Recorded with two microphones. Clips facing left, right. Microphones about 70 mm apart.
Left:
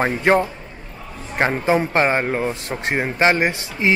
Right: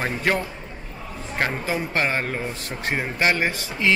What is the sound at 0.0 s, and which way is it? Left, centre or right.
Speech, left.